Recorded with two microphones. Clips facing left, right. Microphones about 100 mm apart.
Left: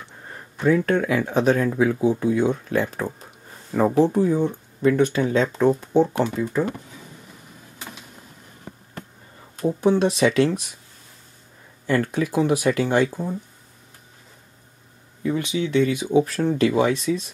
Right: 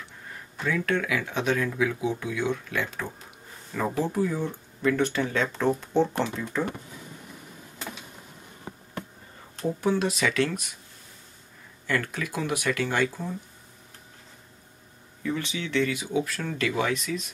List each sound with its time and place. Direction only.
0.3 s speech: 40° left (ahead or behind); by 6.6 s 5° left (ahead or behind)
9.6 s speech: 20° left (ahead or behind)
11.8 s speech: 30° left (ahead or behind)
15.2 s speech: 20° left (ahead or behind)
16.2 s speech: 35° left (ahead or behind)